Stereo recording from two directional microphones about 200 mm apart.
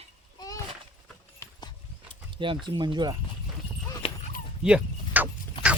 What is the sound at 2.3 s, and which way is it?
Speech, 25° right (ahead or behind).